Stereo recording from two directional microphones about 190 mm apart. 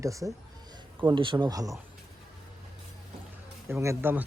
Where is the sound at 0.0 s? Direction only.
15° right (ahead or behind).